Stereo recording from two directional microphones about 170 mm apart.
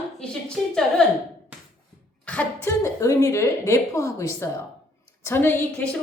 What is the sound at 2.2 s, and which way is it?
A woman's voice, 10° left (ahead or behind).